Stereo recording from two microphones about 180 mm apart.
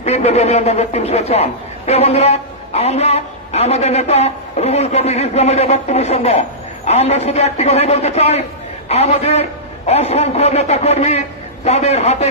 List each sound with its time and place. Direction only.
0.0 s a man's voice: 35° left (ahead or behind)